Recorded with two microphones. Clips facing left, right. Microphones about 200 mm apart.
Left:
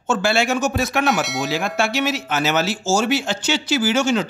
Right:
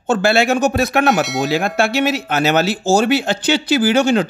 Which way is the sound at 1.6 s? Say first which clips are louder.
Right 4 dB; 60° right (ahead or behind).